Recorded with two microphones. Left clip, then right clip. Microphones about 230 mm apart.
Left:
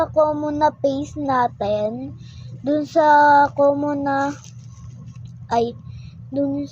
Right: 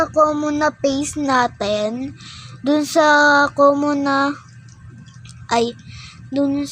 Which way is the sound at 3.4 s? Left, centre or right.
Right.